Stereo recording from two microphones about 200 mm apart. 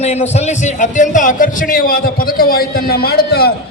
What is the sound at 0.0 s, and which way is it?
A man's voice, 35° left (ahead or behind).